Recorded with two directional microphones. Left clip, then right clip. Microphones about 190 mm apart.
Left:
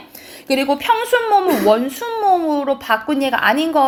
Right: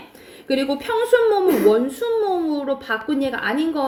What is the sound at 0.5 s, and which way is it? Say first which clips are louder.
Speech: left 5 dB; 25° left (ahead or behind).